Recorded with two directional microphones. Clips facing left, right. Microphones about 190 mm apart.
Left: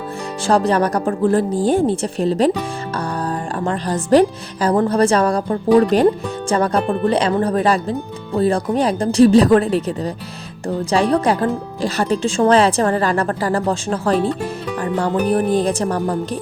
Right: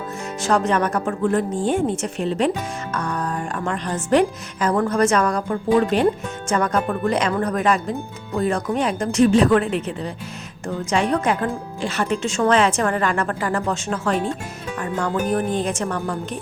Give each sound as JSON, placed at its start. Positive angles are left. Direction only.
{"t": 0.4, "sound": "a woman's voice", "side_deg": 35}
{"t": 3.6, "sound": "a woman's voice", "side_deg": 35}
{"t": 14.8, "sound": "music", "side_deg": 35}
{"t": 15.3, "sound": "a woman's voice", "side_deg": 35}